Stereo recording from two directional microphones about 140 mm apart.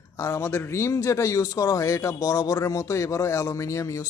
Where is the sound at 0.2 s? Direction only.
20° left (ahead or behind).